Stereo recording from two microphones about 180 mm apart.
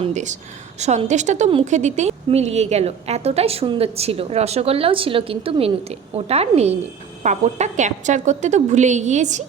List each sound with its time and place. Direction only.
0.0 s a woman's voice: 40° right (ahead or behind)